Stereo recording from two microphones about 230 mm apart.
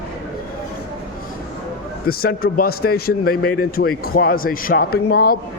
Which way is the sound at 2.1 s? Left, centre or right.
Left.